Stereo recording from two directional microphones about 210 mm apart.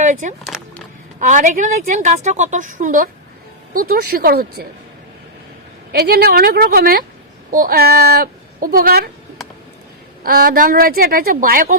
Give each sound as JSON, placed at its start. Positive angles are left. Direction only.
{"t": 0.0, "sound": "speech", "side_deg": -35}
{"t": 0.4, "sound": "a sound", "side_deg": 0}
{"t": 1.2, "sound": "a woman's voice", "side_deg": -35}
{"t": 5.9, "sound": "speech", "side_deg": -50}
{"t": 10.2, "sound": "speech", "side_deg": -45}